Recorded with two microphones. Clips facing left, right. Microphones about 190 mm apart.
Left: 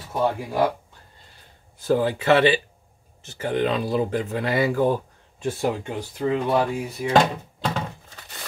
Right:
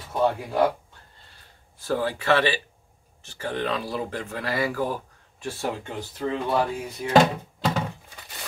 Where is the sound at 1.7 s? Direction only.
20° left (ahead or behind).